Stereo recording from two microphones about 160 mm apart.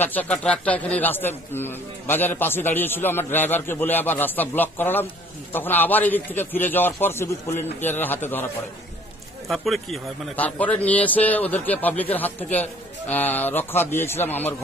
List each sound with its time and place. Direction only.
0.0 s a man's voice: 10° left (ahead or behind)
9.5 s a man's voice: centre (ahead or behind)